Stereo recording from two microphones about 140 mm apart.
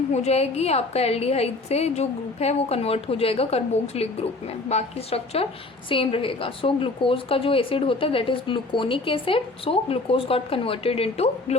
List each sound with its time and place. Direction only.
0.1 s a woman's voice: 50° left (ahead or behind)